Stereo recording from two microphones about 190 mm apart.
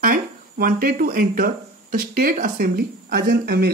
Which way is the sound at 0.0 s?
50° right (ahead or behind).